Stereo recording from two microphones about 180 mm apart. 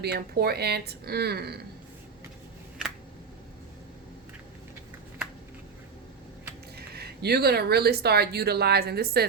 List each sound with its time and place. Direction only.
0.0 s speech: 60° right (ahead or behind)
6.7 s speech: 60° right (ahead or behind)